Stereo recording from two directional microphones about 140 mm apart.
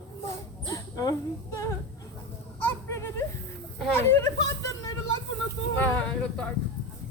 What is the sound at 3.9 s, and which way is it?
Speech, 15° left (ahead or behind).